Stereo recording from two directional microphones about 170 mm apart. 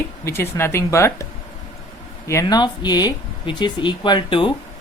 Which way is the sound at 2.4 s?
25° left (ahead or behind).